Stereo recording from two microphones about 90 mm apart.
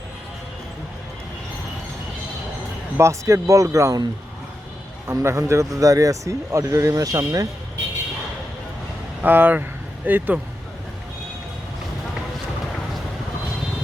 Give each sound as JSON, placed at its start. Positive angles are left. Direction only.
{"t": 3.0, "sound": "speech", "side_deg": -35}
{"t": 5.0, "sound": "speech", "side_deg": -30}
{"t": 9.2, "sound": "speech", "side_deg": -20}